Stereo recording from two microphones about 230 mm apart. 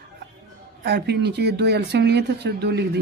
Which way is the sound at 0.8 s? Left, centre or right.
Right.